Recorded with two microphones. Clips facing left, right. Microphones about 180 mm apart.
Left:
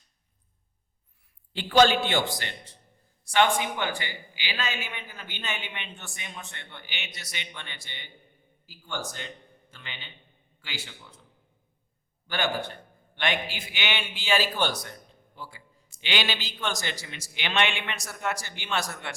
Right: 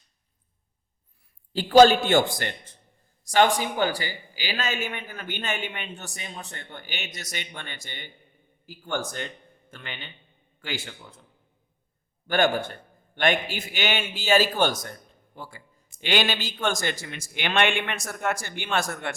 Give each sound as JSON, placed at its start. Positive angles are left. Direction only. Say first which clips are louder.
{"t": 1.5, "sound": "a man's voice", "louder": "right 5 dB", "side_deg": -40}
{"t": 3.2, "sound": "a man's voice", "louder": "right 3 dB", "side_deg": -40}
{"t": 12.3, "sound": "a man's voice", "louder": "right 6 dB", "side_deg": -50}